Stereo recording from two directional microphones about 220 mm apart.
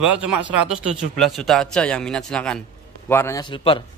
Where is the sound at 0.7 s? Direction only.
Centre (ahead or behind).